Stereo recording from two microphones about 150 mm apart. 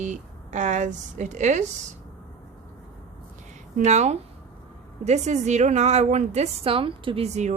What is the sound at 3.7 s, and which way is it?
A woman's voice, 50° right (ahead or behind).